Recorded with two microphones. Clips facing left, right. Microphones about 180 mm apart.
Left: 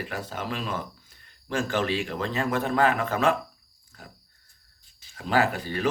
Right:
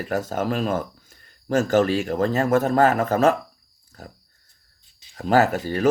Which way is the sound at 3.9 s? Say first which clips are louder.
Right 6 dB; 40° right (ahead or behind).